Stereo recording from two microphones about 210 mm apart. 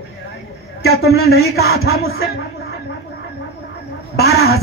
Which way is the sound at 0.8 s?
50° left (ahead or behind).